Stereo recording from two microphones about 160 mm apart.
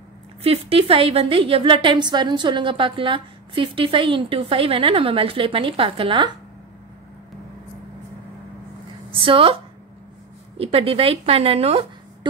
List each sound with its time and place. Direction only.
0.4 s a woman's voice: 35° right (ahead or behind)
9.1 s a woman's voice: 35° right (ahead or behind)
10.6 s a woman's voice: 35° right (ahead or behind)